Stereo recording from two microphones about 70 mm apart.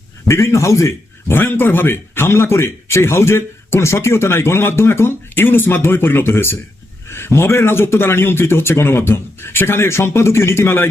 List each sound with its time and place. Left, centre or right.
0.3 s a man's voice: left
1.4 s speech: left